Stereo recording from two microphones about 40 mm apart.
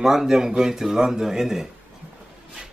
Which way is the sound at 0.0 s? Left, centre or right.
Centre.